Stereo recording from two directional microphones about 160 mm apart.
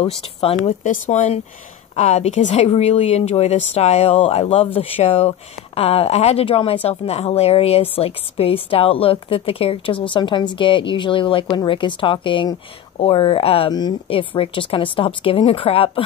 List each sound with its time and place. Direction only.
0.0 s speech: 40° left (ahead or behind)